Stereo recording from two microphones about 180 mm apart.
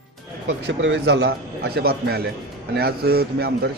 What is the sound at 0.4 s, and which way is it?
A man's voice, 90° right.